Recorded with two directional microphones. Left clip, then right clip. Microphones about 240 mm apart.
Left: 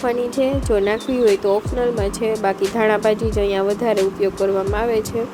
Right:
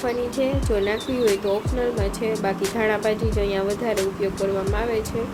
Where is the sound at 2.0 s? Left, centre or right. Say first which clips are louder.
Left 5 dB; left.